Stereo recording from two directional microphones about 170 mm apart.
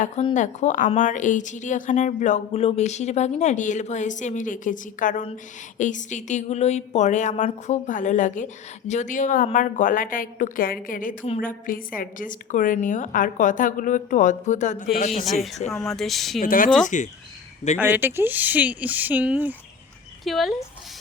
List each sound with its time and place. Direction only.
0.3 s speech: 45° left (ahead or behind)
15.7 s speech: centre (ahead or behind)
16.4 s speech: 55° left (ahead or behind)
17.7 s speech: 10° right (ahead or behind)